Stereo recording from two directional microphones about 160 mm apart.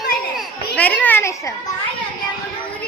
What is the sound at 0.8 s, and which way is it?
Speech, 10° left (ahead or behind).